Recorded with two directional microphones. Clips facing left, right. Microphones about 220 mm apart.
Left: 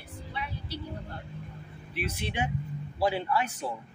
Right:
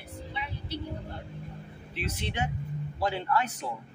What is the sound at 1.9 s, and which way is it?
A man's voice, 10° left (ahead or behind).